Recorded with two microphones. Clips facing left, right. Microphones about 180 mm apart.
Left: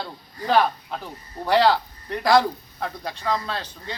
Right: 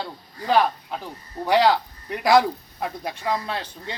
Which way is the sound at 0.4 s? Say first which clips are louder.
Even; 5° right (ahead or behind).